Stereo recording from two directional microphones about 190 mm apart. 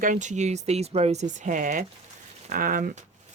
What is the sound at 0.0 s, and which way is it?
Speech, 40° right (ahead or behind).